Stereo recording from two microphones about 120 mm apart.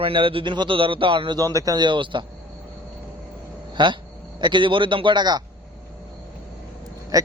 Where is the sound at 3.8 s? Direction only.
40° right (ahead or behind).